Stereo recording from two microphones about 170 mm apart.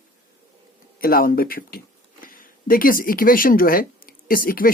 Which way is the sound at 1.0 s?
60° left (ahead or behind).